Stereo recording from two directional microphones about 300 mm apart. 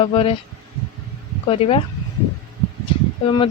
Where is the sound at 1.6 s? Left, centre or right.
Centre.